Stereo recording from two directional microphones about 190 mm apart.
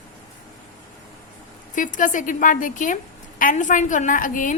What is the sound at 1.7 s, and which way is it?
A woman's voice, 45° left (ahead or behind).